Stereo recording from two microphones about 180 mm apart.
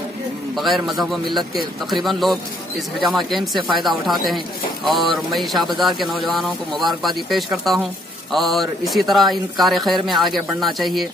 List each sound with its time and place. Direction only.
0.6 s speech: centre (ahead or behind)